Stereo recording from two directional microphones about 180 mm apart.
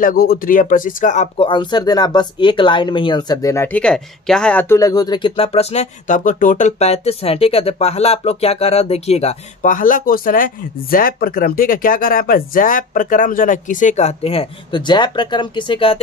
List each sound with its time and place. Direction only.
0.0 s speech: 55° left (ahead or behind)
1.5 s speech: 25° left (ahead or behind)